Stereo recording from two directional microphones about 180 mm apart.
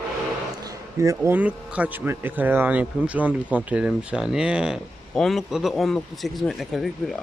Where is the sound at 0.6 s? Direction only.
20° right (ahead or behind).